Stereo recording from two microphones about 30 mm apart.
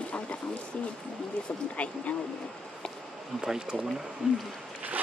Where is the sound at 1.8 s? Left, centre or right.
Left.